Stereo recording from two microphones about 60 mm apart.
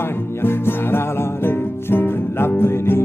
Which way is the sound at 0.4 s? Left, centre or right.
Left.